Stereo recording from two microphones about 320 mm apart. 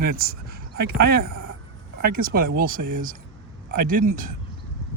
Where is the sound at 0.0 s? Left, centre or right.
Right.